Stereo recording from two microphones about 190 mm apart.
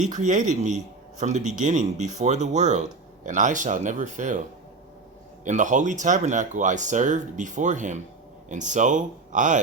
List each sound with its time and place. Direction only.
0.0 s speech: 40° right (ahead or behind)
5.5 s speech: 40° right (ahead or behind)